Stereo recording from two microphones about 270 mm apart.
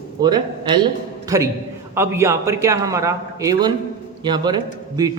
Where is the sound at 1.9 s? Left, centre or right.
Centre.